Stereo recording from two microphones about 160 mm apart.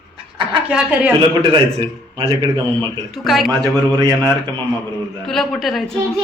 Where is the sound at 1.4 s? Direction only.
30° right (ahead or behind).